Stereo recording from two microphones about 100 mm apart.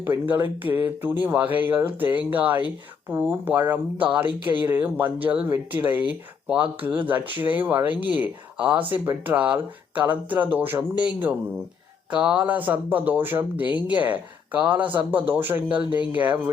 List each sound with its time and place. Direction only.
0.0 s speech: 20° right (ahead or behind)
12.1 s speech: 10° right (ahead or behind)